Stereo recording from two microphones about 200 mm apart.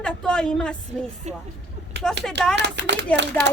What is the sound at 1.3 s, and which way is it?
Speech, 35° right (ahead or behind).